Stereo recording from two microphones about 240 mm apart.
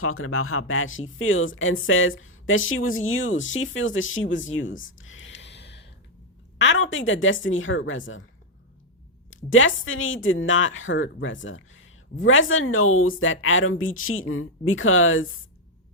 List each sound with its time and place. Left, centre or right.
0.0 s a woman's voice: left
4.9 s a sound: left
6.6 s a woman's voice: left
9.3 s speech: left